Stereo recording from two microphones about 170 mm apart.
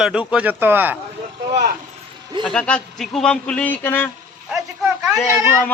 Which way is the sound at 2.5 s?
5° left (ahead or behind).